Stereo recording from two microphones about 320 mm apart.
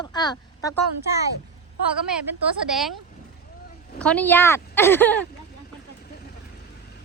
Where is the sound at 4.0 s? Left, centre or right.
Centre.